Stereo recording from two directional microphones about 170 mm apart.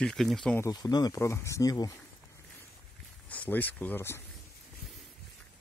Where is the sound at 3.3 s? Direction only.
10° left (ahead or behind).